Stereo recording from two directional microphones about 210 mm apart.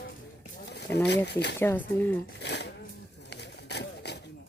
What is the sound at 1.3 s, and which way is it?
Speech, 55° left (ahead or behind).